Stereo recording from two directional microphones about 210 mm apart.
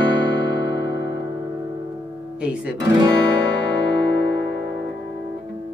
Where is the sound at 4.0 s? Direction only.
25° right (ahead or behind).